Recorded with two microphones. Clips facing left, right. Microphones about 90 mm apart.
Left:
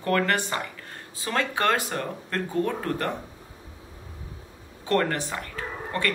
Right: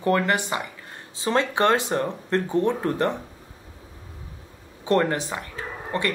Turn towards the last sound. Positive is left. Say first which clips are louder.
# right 1 dB
turn(degrees=-20)  # may be behind; listen again after turning